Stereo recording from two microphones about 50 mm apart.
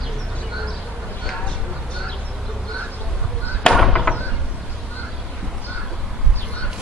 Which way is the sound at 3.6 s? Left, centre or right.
Centre.